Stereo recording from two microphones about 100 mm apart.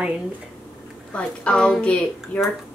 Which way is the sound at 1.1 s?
10° left (ahead or behind).